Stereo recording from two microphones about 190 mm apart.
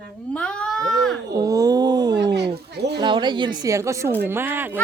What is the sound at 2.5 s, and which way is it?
Speech, 60° right (ahead or behind).